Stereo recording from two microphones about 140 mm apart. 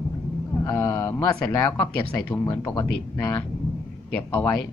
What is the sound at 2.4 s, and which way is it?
Speech, 25° left (ahead or behind).